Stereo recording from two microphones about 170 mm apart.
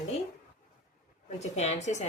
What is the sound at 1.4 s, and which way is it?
Speech, 40° left (ahead or behind).